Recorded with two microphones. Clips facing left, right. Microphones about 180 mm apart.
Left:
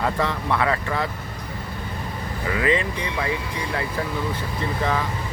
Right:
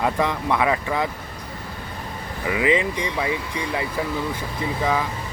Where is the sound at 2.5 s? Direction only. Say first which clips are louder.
Right 2 dB; 15° right (ahead or behind).